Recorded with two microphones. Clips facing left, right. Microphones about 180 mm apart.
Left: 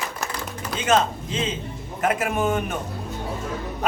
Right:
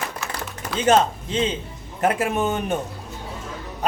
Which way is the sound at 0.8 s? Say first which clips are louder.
Right 3 dB; 30° right (ahead or behind).